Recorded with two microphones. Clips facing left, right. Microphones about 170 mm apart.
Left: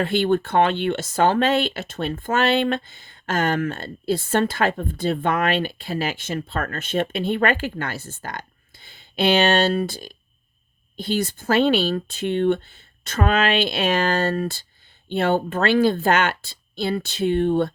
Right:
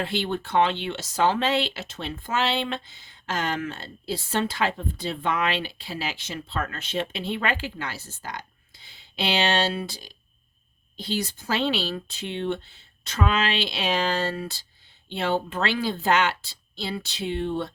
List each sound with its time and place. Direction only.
0.0 s speech: 55° left (ahead or behind)